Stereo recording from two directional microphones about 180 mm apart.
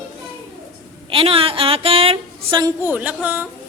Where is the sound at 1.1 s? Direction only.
30° right (ahead or behind); by 3.4 s 10° right (ahead or behind).